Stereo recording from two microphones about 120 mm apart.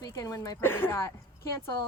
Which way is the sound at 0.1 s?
30° left (ahead or behind).